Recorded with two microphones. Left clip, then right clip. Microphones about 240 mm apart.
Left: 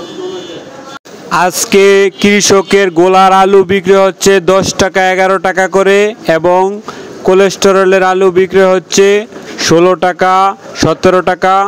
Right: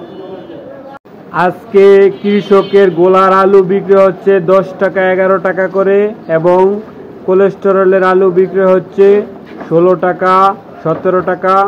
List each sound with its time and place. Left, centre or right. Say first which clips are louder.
1.4 s speech: right 1 dB; left
7.2 s speech: left 2 dB; left
7.6 s speech: left 2 dB; left